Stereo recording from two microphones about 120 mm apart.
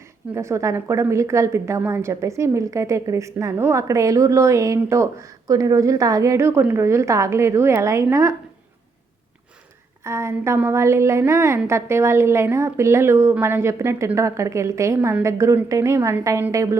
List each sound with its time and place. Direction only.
0.3 s a woman's voice: 25° right (ahead or behind)
10.0 s a woman's voice: 20° right (ahead or behind)